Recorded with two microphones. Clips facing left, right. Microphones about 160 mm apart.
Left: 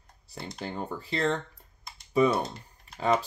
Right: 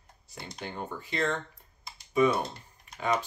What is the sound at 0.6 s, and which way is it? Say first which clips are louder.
Speech: left 2 dB; 35° left (ahead or behind).